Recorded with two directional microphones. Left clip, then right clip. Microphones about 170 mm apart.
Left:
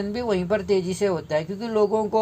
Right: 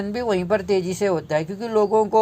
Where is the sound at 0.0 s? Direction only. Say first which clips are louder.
Right 2 dB; 35° right (ahead or behind).